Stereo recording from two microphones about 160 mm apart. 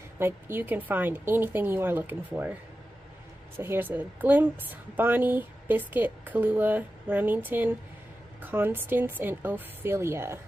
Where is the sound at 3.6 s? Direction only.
15° right (ahead or behind).